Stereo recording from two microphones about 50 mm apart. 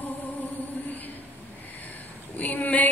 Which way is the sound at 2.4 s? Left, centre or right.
Left.